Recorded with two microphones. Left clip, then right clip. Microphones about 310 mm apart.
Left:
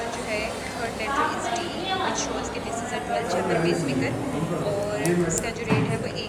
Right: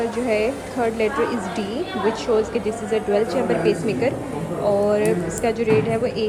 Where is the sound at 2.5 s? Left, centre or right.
Centre.